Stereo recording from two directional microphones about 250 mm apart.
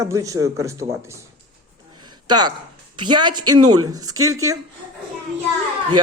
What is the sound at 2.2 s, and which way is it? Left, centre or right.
A woman's voice, centre.